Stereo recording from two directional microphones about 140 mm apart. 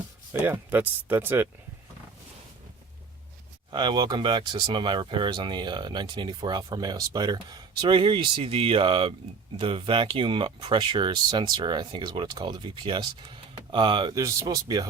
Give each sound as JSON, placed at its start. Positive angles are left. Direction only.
{"t": 0.3, "sound": "speech", "side_deg": -15}
{"t": 3.7, "sound": "speech", "side_deg": -35}
{"t": 14.2, "sound": "speech", "side_deg": -20}